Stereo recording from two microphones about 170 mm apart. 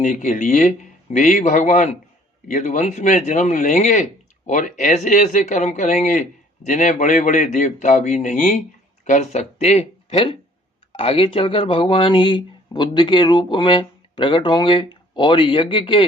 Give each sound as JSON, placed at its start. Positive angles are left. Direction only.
{"t": 0.0, "sound": "a man's voice", "side_deg": 45}